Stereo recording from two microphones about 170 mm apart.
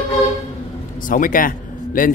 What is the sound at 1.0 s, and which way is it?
Speech, 55° left (ahead or behind).